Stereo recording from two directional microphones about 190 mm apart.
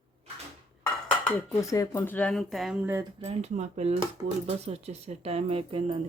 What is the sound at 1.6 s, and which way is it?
Speech, 15° left (ahead or behind).